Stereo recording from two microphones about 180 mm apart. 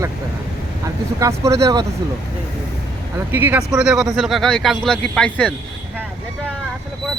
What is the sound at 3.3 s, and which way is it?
Speech, 10° right (ahead or behind).